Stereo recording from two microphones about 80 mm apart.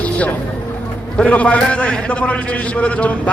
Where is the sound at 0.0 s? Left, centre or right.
Centre.